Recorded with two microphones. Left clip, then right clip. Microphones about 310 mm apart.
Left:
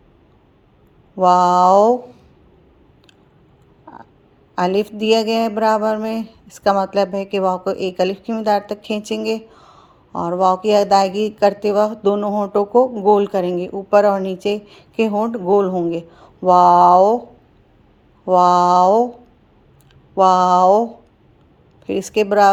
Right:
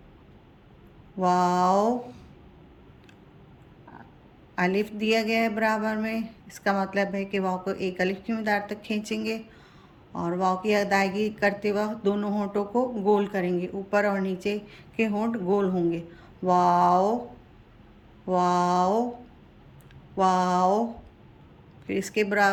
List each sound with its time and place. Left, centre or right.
1.2 s speech: centre
4.5 s speech: centre
18.3 s speech: centre
20.1 s speech: centre